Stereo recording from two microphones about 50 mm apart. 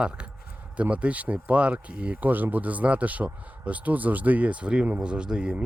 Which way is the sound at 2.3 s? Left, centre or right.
Right.